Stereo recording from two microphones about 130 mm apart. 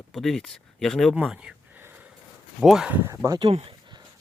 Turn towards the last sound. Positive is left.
turn(degrees=-25)  # may be behind; listen again after turning